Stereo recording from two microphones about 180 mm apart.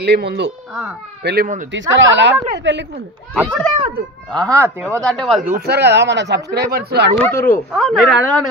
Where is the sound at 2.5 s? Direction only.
80° right.